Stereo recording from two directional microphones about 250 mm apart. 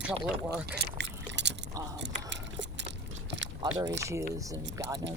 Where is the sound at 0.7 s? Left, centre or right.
Right.